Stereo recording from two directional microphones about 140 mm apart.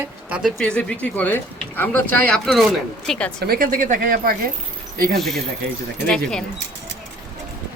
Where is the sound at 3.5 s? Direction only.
85° right.